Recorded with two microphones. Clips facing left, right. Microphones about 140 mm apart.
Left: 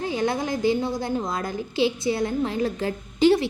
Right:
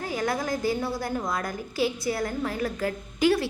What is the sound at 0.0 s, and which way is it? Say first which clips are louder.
A woman's voice: left 3 dB; 25° left (ahead or behind).